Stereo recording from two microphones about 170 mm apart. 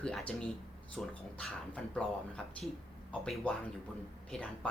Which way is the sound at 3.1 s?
5° left (ahead or behind).